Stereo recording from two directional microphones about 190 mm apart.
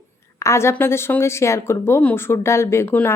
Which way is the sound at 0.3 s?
15° left (ahead or behind).